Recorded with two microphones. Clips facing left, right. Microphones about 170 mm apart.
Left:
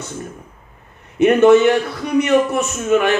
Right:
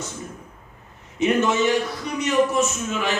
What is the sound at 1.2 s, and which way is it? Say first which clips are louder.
A man's voice: left 10 dB; 60° left (ahead or behind).